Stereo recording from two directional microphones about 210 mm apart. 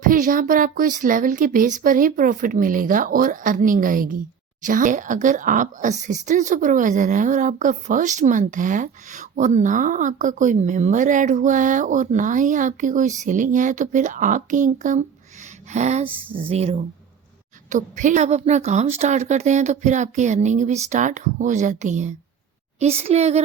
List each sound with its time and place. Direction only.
0.0 s a woman's voice: 40° right (ahead or behind)